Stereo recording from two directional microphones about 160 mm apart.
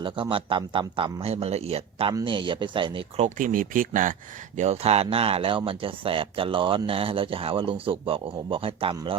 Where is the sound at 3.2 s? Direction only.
55° right (ahead or behind).